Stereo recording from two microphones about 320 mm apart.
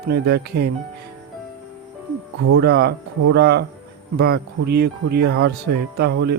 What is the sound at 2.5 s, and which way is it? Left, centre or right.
Speech, right.